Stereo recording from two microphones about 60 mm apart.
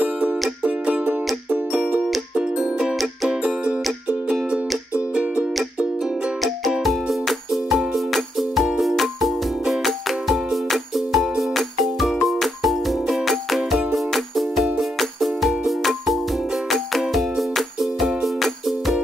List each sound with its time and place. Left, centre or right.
0.0 s music: right
1.8 s music: centre
6.8 s music: centre